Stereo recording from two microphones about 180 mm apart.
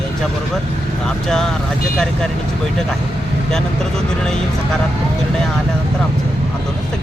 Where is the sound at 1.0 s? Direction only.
5° left (ahead or behind).